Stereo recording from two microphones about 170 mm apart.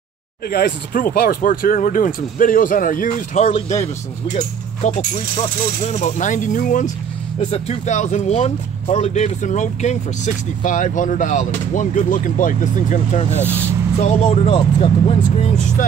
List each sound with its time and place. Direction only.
0.5 s speech: 65° left (ahead or behind)
3.4 s speech: 40° left (ahead or behind)
4.8 s speech: 45° left (ahead or behind)
7.3 s speech: 35° left (ahead or behind)